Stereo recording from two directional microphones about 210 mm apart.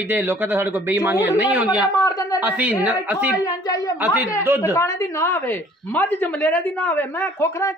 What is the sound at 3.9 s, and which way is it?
Speech, 10° right (ahead or behind).